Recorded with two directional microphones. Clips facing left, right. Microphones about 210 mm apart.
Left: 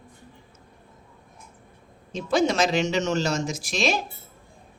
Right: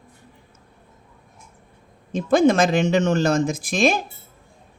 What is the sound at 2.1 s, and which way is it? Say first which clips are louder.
Speech: right 6 dB; 50° right (ahead or behind).